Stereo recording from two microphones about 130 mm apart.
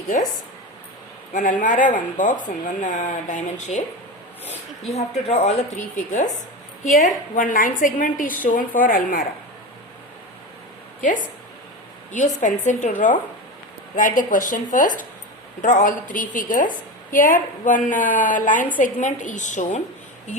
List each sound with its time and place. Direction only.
1.3 s speech: 90° left; by 3.8 s 70° left (ahead or behind)
4.9 s a woman's voice: 55° left (ahead or behind)
6.8 s a woman's voice: 85° left
11.0 s a woman's voice: 90° left
12.1 s a woman's voice: 75° left (ahead or behind); by 18.7 s 90° left
18.8 s speech: 70° left (ahead or behind)